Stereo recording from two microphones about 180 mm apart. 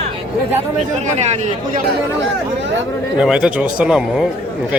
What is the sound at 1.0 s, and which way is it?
Speech, 40° right (ahead or behind).